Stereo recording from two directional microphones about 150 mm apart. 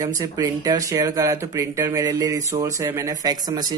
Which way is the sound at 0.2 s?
25° right (ahead or behind).